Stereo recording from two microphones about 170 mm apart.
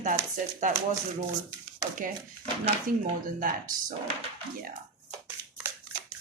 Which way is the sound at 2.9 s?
60° right (ahead or behind).